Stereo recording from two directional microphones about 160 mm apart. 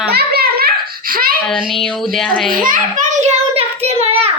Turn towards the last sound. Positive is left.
turn(degrees=-40)  # may be behind; listen again after turning